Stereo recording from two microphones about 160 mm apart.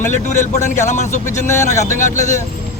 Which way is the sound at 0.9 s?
50° left (ahead or behind).